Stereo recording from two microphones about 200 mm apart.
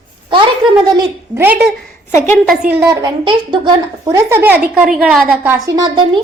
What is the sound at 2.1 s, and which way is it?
Speech, 10° left (ahead or behind).